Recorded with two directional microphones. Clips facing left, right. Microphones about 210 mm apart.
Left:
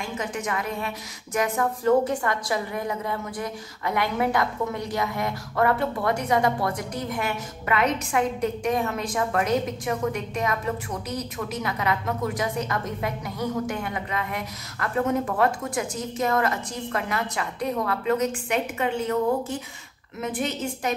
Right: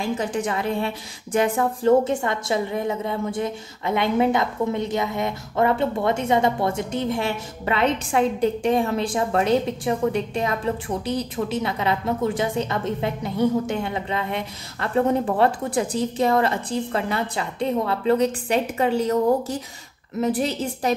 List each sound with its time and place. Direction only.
0.0 s a woman's voice: 30° right (ahead or behind)